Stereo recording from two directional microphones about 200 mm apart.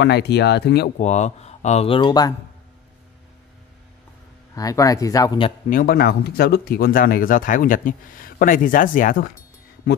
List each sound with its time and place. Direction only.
0.0 s speech: 55° left (ahead or behind)
0.9 s speech: 35° left (ahead or behind)
4.6 s speech: 15° left (ahead or behind)
5.7 s speech: 45° left (ahead or behind)